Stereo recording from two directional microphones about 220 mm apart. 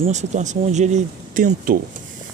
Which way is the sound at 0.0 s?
30° right (ahead or behind).